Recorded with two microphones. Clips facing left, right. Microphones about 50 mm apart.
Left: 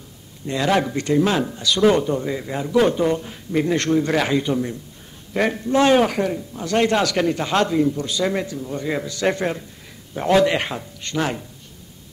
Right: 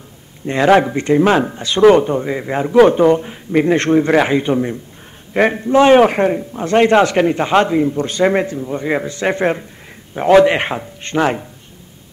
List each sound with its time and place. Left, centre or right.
0.5 s a man's voice: right